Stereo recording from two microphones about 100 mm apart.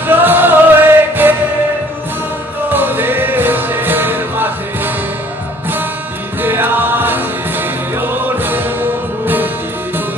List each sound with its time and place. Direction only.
0.0 s music: 20° right (ahead or behind)
2.7 s music: 20° right (ahead or behind)
6.4 s music: 20° right (ahead or behind)